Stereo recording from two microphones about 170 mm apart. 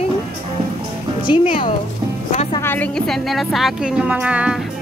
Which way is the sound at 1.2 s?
30° left (ahead or behind).